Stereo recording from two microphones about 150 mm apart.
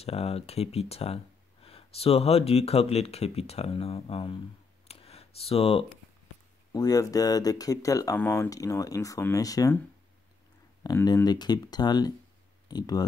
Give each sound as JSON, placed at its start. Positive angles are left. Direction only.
{"t": 0.0, "sound": "speech", "side_deg": 40}
{"t": 4.8, "sound": "a sound", "side_deg": 45}
{"t": 6.7, "sound": "speech", "side_deg": 25}
{"t": 10.8, "sound": "speech", "side_deg": 25}